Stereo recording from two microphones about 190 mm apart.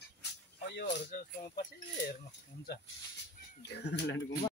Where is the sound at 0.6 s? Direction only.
60° left (ahead or behind).